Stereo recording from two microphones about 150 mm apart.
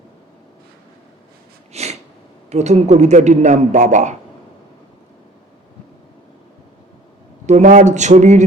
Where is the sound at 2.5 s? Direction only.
50° right (ahead or behind).